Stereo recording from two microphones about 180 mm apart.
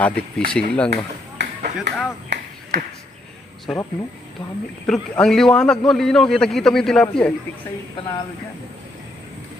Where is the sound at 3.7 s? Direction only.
Centre (ahead or behind).